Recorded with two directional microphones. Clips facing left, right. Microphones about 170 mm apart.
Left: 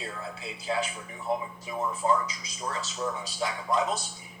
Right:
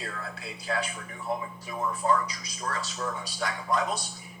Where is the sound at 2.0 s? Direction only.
25° left (ahead or behind).